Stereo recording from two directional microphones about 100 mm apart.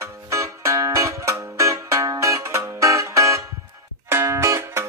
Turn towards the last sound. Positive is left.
turn(degrees=-25)  # may be behind; listen again after turning